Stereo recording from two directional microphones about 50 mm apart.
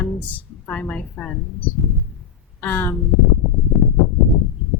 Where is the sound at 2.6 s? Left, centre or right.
Left.